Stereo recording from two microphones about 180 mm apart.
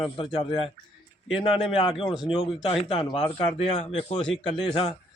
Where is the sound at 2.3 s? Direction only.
30° left (ahead or behind).